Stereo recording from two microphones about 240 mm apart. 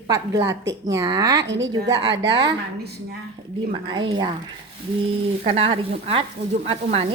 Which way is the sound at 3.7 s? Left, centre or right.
Centre.